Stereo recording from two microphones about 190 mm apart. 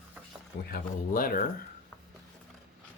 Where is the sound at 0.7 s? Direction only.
50° left (ahead or behind).